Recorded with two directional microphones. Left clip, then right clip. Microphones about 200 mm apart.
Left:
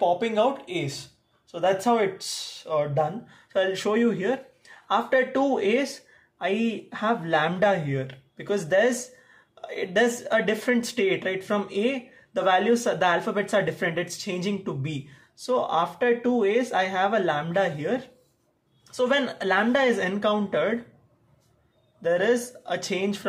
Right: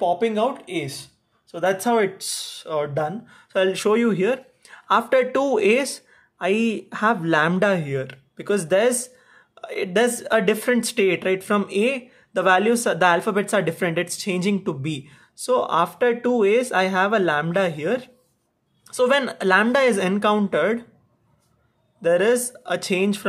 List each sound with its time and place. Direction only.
0.0 s speech: 25° right (ahead or behind)
22.0 s speech: 40° right (ahead or behind)